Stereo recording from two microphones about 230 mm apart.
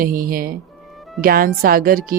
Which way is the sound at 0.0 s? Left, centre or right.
Right.